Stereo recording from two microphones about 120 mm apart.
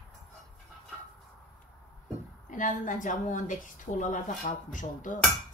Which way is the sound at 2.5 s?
90° left.